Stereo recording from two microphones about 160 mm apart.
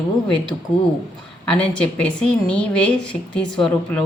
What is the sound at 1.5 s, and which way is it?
Speech, 5° left (ahead or behind).